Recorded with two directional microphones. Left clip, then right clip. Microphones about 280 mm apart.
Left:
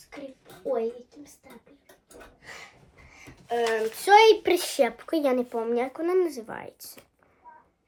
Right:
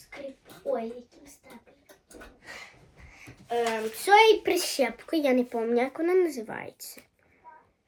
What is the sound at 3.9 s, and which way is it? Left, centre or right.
Speech, left.